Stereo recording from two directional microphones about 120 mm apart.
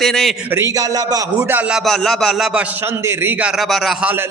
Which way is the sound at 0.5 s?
30° right (ahead or behind).